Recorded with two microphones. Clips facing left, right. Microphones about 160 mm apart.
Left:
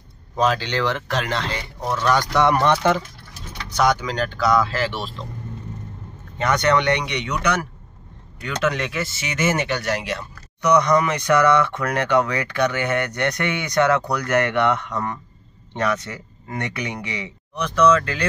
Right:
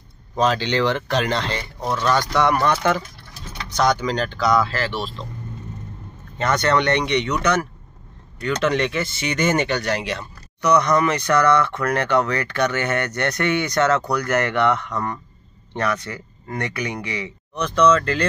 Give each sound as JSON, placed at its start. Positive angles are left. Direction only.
{"t": 0.4, "sound": "speech", "side_deg": 5}
{"t": 2.1, "sound": "speech", "side_deg": 20}
{"t": 3.7, "sound": "speech", "side_deg": 10}
{"t": 6.3, "sound": "speech", "side_deg": 15}
{"t": 10.6, "sound": "speech", "side_deg": 15}